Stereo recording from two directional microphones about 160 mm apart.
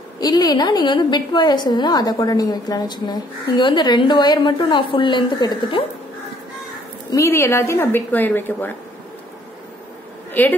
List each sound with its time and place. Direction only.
0.2 s a woman's voice: 25° left (ahead or behind)
7.1 s a woman's voice: 20° left (ahead or behind)
10.4 s a woman's voice: 10° left (ahead or behind)